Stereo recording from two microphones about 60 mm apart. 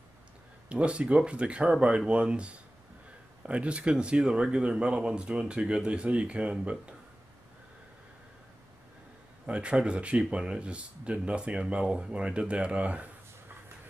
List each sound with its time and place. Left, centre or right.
0.7 s speech: centre
9.5 s speech: centre